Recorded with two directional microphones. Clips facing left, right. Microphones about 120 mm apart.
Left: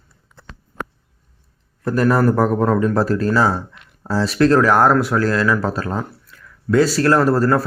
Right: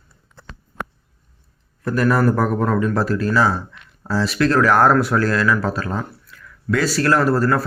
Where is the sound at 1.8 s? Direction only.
30° left (ahead or behind).